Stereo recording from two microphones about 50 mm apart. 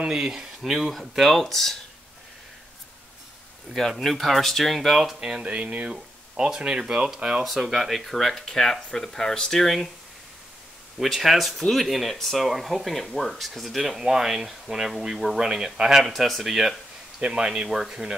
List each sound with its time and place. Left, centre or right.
0.0 s speech: centre
3.7 s speech: centre
4.9 s speech: centre
5.4 s speech: right
7.4 s speech: centre
11.0 s speech: centre
17.2 s speech: centre